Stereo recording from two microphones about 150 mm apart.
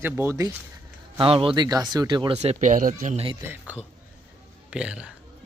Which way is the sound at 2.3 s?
50° right (ahead or behind).